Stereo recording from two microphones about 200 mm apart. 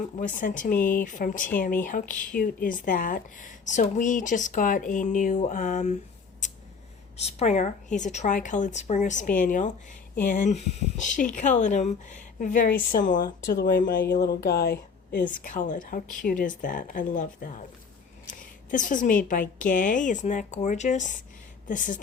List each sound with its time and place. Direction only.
0.3 s a woman's voice: 40° left (ahead or behind)
6.4 s a sound: 40° left (ahead or behind)
7.2 s a woman's voice: 30° left (ahead or behind)
13.5 s speech: 55° left (ahead or behind)
15.3 s a woman's voice: 40° left (ahead or behind)